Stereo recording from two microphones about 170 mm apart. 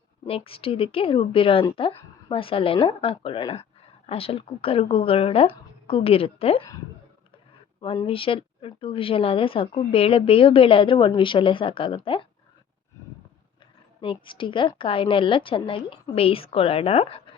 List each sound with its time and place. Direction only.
0.3 s speech: 35° left (ahead or behind)
8.0 s speech: 30° left (ahead or behind)
14.0 s speech: 30° left (ahead or behind)